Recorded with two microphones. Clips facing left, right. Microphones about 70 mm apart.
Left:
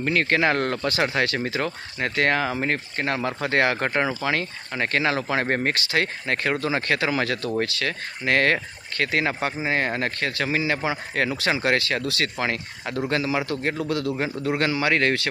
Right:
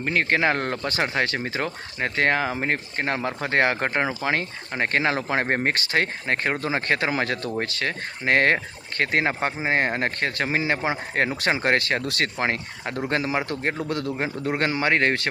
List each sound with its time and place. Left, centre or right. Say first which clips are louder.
0.0 s speech: left 1 dB; centre
0.9 s speech: even; right